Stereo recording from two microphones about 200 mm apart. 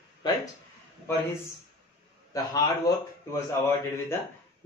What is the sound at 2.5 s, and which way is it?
Speech, 20° left (ahead or behind).